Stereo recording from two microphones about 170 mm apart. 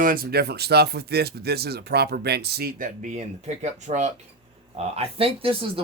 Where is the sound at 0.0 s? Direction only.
55° right (ahead or behind).